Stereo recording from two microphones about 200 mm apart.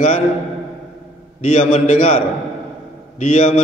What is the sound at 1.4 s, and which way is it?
A man's voice, 35° left (ahead or behind).